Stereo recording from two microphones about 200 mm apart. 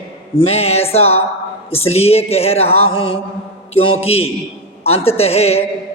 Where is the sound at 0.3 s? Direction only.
30° left (ahead or behind).